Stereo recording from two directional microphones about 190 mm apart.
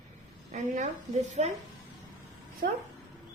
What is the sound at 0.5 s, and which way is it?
Speech, 40° right (ahead or behind).